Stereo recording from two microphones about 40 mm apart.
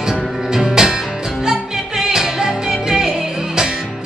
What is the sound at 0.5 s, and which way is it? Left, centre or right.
Music, centre.